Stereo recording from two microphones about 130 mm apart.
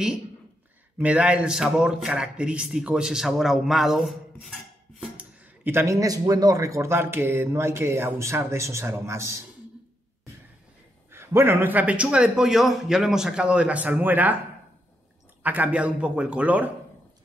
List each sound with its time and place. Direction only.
1.0 s a man's voice: 10° right (ahead or behind)
5.1 s a man's voice: 15° right (ahead or behind)
11.1 s a man's voice: 20° right (ahead or behind)
15.4 s a man's voice: 10° right (ahead or behind)